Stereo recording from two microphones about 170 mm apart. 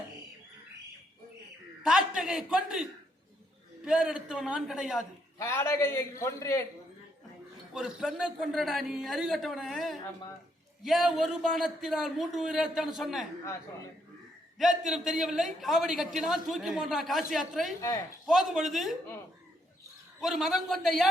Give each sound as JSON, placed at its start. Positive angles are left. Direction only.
{"t": 1.8, "sound": "a man's voice", "side_deg": -5}
{"t": 3.8, "sound": "a man's voice", "side_deg": -5}
{"t": 5.4, "sound": "a man's voice", "side_deg": 15}
{"t": 7.7, "sound": "a man's voice", "side_deg": 0}
{"t": 14.6, "sound": "a man's voice", "side_deg": 0}
{"t": 20.2, "sound": "a man's voice", "side_deg": 0}